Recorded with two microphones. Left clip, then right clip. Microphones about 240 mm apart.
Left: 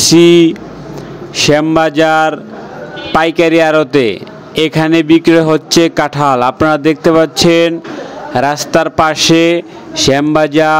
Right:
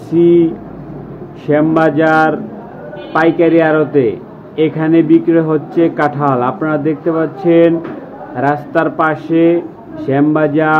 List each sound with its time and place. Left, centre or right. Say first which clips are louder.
0.1 s a man's voice: left 2 dB; left